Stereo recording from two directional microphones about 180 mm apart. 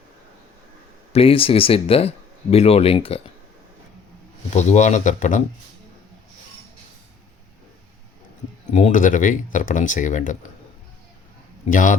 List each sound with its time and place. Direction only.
1.1 s speech: 30° left (ahead or behind)
4.5 s speech: 40° left (ahead or behind)
8.7 s speech: 45° left (ahead or behind)
11.6 s speech: 45° left (ahead or behind)